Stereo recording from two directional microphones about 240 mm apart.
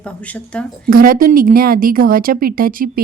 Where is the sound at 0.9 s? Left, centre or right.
Right.